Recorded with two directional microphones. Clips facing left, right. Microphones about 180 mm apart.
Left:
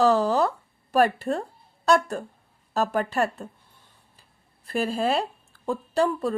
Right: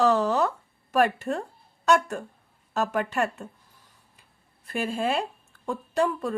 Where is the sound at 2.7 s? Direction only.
35° left (ahead or behind).